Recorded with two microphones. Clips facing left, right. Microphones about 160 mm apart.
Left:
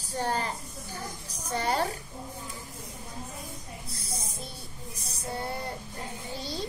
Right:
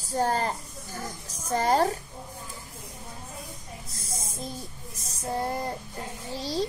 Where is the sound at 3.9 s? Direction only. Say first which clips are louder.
Even; 40° right (ahead or behind).